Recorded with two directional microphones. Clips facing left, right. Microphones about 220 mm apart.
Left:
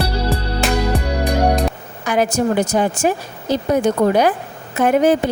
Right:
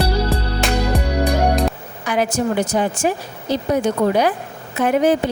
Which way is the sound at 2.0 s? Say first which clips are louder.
Left 2 dB; 45° left (ahead or behind).